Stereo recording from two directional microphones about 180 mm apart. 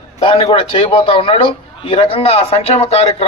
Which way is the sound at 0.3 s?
30° left (ahead or behind).